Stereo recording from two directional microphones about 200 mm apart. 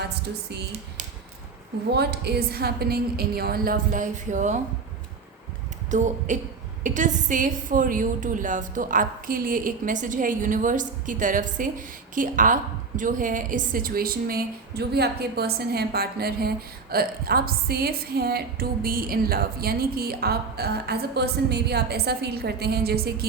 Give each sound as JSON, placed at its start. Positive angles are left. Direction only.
{"t": 1.9, "sound": "a woman's voice", "side_deg": -55}
{"t": 5.9, "sound": "a woman's voice", "side_deg": -40}